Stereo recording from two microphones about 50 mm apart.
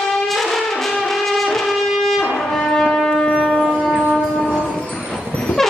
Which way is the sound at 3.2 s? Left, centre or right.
Centre.